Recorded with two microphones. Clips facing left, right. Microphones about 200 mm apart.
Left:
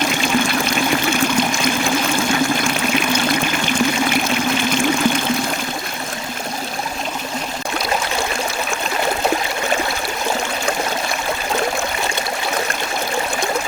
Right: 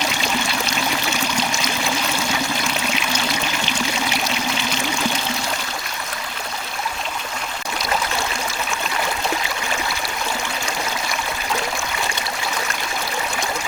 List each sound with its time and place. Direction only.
0.1 s water: 50° left (ahead or behind)
2.1 s trickle: 50° left (ahead or behind)